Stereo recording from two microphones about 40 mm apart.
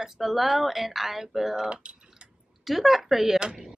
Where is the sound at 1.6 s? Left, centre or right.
Right.